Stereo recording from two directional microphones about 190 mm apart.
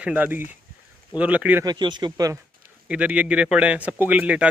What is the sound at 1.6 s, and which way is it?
Speech, 20° right (ahead or behind).